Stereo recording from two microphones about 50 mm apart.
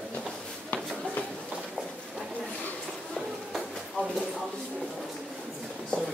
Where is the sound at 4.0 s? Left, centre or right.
Left.